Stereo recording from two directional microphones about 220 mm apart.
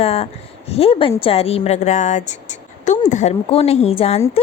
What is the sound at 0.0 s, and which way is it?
A woman's voice, 25° left (ahead or behind).